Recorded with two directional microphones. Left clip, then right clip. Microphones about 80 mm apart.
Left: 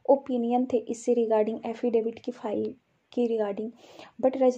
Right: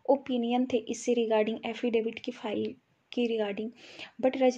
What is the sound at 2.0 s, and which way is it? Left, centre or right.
A woman's voice, left.